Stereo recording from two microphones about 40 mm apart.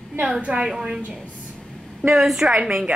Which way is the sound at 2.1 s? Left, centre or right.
Centre.